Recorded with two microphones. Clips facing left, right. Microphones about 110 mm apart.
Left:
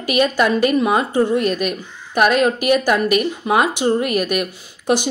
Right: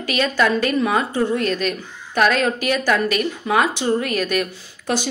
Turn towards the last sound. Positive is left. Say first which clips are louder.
# left 5 dB
turn(degrees=15)  # may be behind; listen again after turning